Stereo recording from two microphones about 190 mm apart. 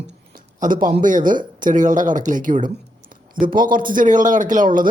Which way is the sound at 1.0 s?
45° right (ahead or behind).